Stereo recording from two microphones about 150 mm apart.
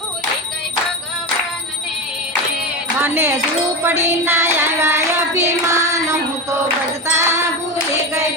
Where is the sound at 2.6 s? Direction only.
15° right (ahead or behind).